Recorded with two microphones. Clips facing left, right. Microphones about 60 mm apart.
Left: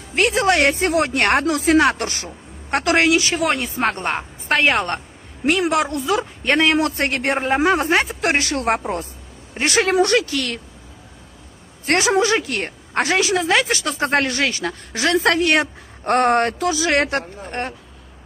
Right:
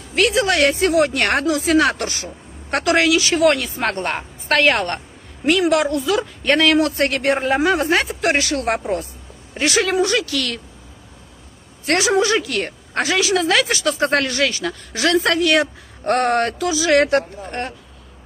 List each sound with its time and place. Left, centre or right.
0.1 s a woman's voice: left
4.1 s a woman's voice: centre; by 8.6 s left
8.6 s speech: centre
9.8 s speech: left
10.2 s a woman's voice: left
11.8 s a woman's voice: left
13.0 s speech: left
13.4 s a woman's voice: left